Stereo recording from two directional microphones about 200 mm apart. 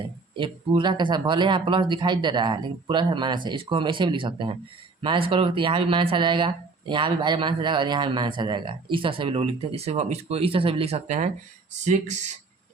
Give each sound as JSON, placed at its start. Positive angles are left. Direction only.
{"t": 0.3, "sound": "speech", "side_deg": -25}